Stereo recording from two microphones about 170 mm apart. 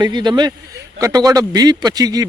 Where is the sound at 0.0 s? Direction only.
25° right (ahead or behind).